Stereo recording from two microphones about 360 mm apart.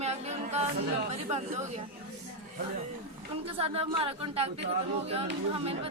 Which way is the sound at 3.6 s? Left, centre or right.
Centre.